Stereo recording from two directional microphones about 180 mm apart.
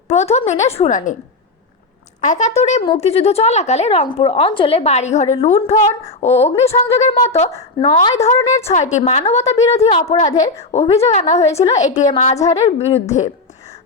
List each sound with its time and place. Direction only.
0.1 s speech: 40° left (ahead or behind)
2.2 s speech: 45° left (ahead or behind)